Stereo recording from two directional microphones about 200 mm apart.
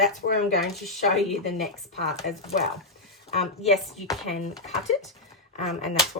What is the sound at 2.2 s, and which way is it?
Speech, 55° left (ahead or behind).